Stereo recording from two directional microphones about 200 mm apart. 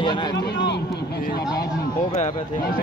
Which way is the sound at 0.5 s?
60° left (ahead or behind).